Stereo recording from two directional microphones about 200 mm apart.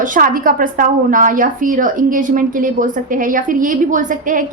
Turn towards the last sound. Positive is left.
turn(degrees=-40)  # may be behind; listen again after turning